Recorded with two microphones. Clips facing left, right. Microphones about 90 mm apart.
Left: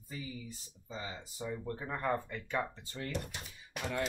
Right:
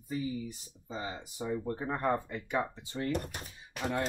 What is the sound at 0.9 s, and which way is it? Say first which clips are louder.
Speech: right 4 dB; 20° right (ahead or behind).